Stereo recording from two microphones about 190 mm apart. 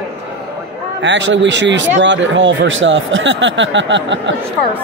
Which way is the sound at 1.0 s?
70° right (ahead or behind).